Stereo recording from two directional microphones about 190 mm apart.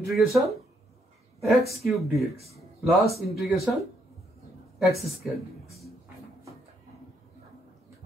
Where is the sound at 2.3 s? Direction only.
35° right (ahead or behind).